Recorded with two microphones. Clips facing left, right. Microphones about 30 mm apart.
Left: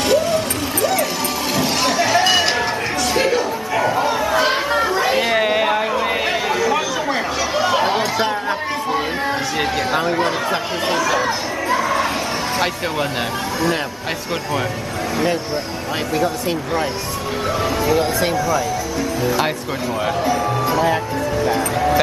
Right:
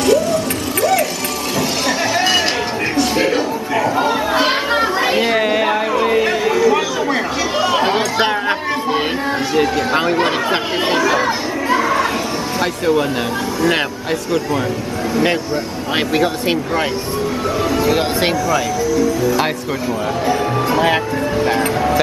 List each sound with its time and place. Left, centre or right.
0.0 s a sound: centre
2.1 s a sound: centre
3.2 s a sound: centre
3.9 s chatter: right
5.1 s a sound: centre
6.6 s chatter: centre
7.7 s chatter: centre
8.2 s chatter: right
9.9 s speech: right
11.0 s chatter: centre
11.7 s children playing: centre
17.9 s speech: right